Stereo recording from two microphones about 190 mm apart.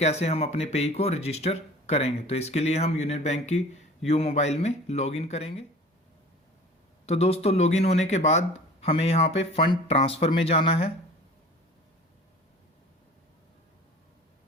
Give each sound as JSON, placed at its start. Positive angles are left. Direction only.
{"t": 0.0, "sound": "speech", "side_deg": 35}
{"t": 7.0, "sound": "speech", "side_deg": 35}